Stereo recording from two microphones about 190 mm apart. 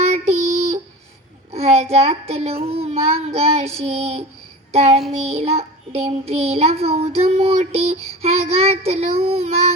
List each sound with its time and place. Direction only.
0.0 s child singing: 35° right (ahead or behind)